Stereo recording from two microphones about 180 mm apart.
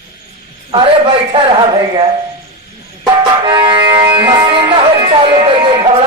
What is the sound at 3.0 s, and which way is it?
Music, 25° right (ahead or behind).